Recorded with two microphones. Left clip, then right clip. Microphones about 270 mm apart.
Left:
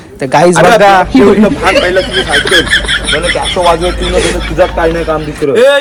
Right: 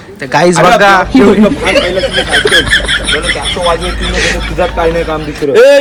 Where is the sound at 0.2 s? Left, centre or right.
Centre.